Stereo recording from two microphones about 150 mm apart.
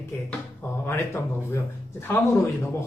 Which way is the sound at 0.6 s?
15° left (ahead or behind).